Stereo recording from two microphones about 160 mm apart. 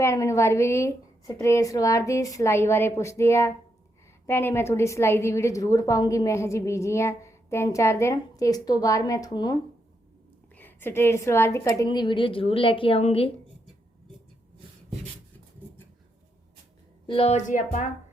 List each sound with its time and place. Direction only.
0.0 s a woman's voice: 20° left (ahead or behind)
10.5 s a woman's voice: 10° left (ahead or behind); by 13.3 s 40° left (ahead or behind)
17.1 s speech: 40° left (ahead or behind)